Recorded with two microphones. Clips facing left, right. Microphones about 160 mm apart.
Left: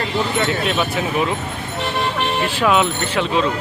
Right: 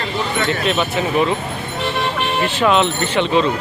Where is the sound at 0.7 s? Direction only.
Centre (ahead or behind).